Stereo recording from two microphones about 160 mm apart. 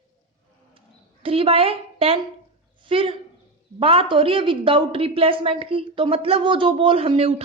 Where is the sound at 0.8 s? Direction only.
35° right (ahead or behind).